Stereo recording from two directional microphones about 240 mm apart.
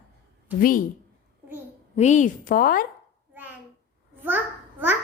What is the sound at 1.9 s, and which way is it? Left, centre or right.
Speech, left.